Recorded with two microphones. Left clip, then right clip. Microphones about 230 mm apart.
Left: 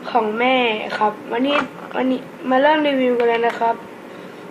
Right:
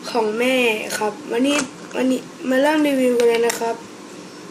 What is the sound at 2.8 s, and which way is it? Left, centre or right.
Speech, centre.